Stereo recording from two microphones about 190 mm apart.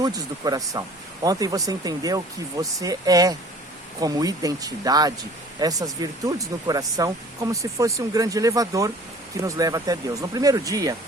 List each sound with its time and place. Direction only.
0.0 s speech: 20° right (ahead or behind)